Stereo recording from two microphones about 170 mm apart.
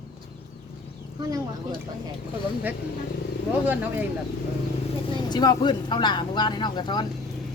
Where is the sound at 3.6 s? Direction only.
10° right (ahead or behind).